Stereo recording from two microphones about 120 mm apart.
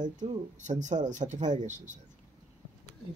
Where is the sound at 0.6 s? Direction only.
85° right.